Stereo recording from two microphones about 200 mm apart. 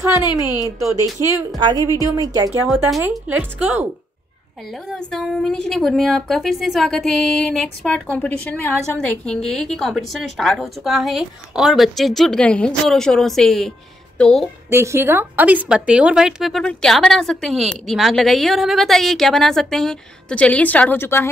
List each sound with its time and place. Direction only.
0.2 s a woman's voice: 20° left (ahead or behind)
1.6 s a woman's voice: 20° right (ahead or behind)
2.9 s a woman's voice: 5° right (ahead or behind)
4.9 s a woman's voice: centre (ahead or behind)
14.7 s a woman's voice: 10° right (ahead or behind); by 21.3 s 10° left (ahead or behind)